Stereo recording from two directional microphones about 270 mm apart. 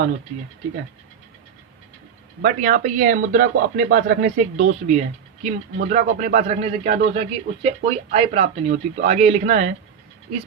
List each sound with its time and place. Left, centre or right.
2.4 s speech: right